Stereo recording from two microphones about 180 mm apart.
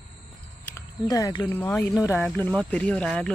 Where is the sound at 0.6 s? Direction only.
15° left (ahead or behind).